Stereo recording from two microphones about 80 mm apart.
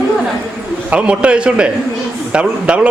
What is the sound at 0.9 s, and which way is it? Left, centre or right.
A man's voice, centre.